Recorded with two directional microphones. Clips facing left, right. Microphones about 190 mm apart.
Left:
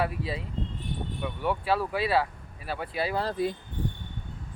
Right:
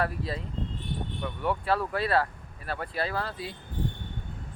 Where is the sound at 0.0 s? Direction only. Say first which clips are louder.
Left 1 dB; 5° left (ahead or behind).